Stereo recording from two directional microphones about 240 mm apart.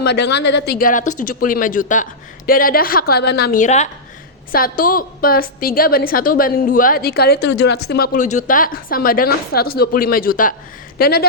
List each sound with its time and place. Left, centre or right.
0.0 s a woman's voice: left